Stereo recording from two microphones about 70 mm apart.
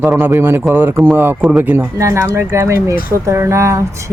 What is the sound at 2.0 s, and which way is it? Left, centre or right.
Speech, right.